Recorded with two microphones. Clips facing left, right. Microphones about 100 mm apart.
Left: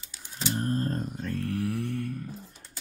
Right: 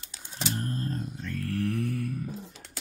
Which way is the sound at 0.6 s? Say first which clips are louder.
Left 8 dB; 35° left (ahead or behind).